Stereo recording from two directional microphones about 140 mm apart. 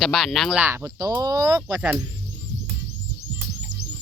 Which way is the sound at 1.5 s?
10° right (ahead or behind).